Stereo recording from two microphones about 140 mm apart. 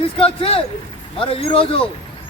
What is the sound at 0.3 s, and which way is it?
A man's voice, 40° left (ahead or behind).